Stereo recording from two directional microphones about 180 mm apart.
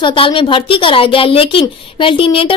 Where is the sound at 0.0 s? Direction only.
30° left (ahead or behind).